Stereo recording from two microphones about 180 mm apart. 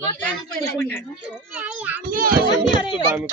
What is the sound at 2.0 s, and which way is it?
Speech, 50° right (ahead or behind).